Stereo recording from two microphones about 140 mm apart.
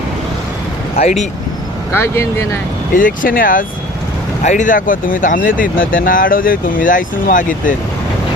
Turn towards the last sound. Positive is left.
turn(degrees=70)  # may be behind; listen again after turning